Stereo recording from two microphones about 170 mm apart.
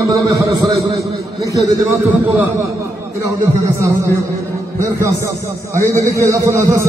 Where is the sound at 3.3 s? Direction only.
15° right (ahead or behind).